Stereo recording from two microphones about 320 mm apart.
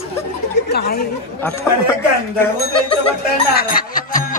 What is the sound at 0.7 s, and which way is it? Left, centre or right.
Speech, left.